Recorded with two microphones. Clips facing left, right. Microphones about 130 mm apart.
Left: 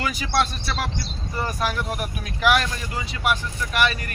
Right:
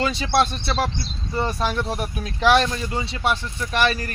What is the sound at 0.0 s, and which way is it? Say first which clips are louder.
Speech: right 3 dB; 30° right (ahead or behind).